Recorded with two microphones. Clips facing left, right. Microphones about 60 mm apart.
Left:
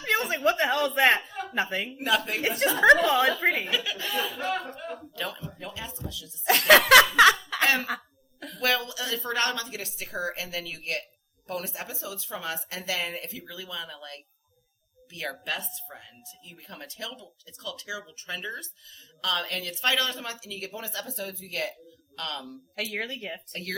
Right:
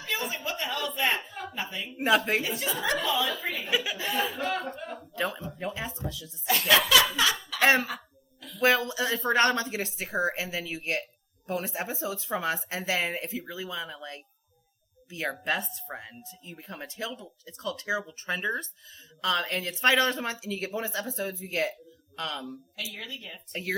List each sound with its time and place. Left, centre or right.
0.0 s a sound: left
2.0 s speech: right
2.4 s a woman's voice: left
3.7 s speech: centre; by 6.3 s right
6.4 s a woman's voice: left
8.4 s a sound: left
8.6 s speech: right
22.7 s a woman's voice: left
23.5 s speech: centre